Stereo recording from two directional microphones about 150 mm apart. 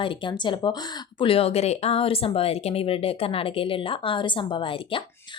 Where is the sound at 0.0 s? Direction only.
35° left (ahead or behind).